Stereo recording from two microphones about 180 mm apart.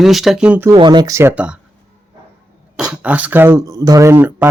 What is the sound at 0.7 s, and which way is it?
Speech, 25° right (ahead or behind).